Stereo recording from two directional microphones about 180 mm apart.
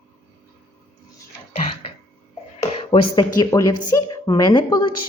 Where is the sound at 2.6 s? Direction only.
25° left (ahead or behind).